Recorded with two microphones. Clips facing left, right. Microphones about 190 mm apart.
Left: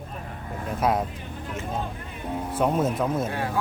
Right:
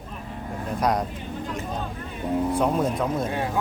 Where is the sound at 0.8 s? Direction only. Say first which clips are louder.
Even; 5° left (ahead or behind).